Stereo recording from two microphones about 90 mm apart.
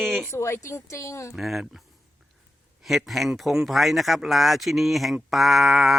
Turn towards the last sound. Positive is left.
turn(degrees=0)  # may be behind; listen again after turning